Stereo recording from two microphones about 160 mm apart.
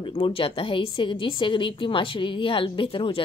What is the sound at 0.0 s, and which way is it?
A woman's voice, 35° left (ahead or behind).